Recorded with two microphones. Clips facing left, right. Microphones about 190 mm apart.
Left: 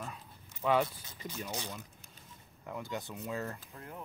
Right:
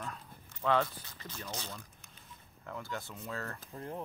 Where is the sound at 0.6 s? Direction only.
15° left (ahead or behind).